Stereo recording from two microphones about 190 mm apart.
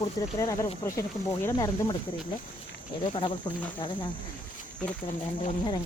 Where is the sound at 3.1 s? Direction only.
25° left (ahead or behind).